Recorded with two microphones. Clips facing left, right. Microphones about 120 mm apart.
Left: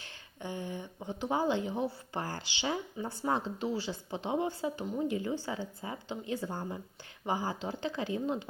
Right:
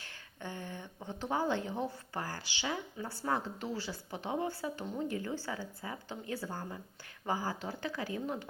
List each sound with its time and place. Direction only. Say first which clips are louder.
0.0 s a woman's voice: left 2 dB; 20° left (ahead or behind)